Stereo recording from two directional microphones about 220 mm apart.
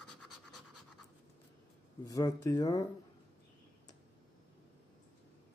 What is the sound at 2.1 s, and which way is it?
Speech, 15° left (ahead or behind).